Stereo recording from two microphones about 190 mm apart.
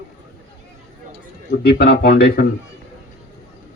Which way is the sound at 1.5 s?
55° left (ahead or behind).